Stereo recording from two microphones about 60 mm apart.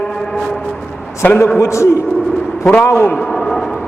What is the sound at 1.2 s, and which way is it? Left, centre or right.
Speech, left.